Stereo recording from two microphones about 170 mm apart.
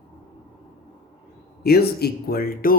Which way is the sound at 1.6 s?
65° left (ahead or behind).